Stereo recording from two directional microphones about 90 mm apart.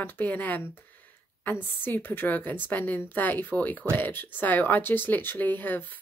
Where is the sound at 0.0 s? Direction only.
20° left (ahead or behind).